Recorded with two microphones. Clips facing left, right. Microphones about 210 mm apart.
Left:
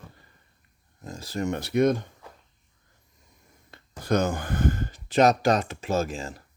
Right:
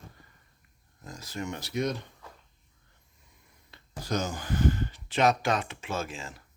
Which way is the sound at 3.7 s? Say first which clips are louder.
Left 7 dB; 60° left (ahead or behind).